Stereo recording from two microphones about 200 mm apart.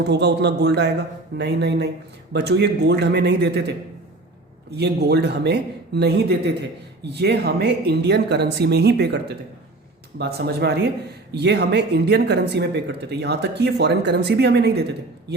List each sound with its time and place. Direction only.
0.0 s a man's voice: 60° right (ahead or behind)